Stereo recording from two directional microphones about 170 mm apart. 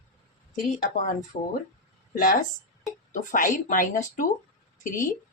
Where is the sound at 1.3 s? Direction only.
40° left (ahead or behind).